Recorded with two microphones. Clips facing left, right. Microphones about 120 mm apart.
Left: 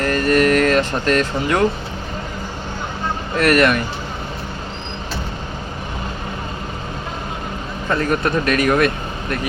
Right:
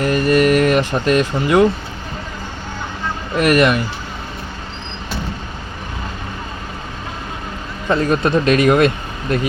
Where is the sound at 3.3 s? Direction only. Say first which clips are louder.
Right 1 dB; 15° right (ahead or behind).